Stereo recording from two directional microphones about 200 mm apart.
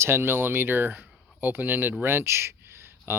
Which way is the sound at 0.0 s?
10° right (ahead or behind).